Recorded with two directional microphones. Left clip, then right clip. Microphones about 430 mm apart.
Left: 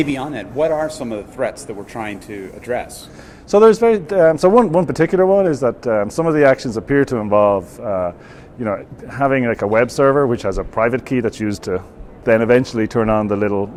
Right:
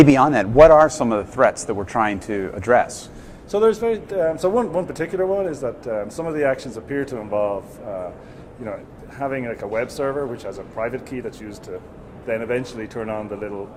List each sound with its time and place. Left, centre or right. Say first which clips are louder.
0.0 s a man's voice: right 8 dB; right
3.5 s speech: left 7 dB; left
9.1 s speech: left 9 dB; left